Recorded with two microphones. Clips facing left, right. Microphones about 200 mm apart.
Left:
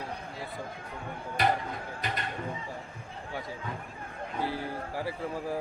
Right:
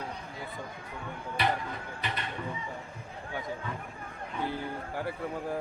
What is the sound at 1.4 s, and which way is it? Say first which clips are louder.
Speech: left 3 dB; 45° left (ahead or behind).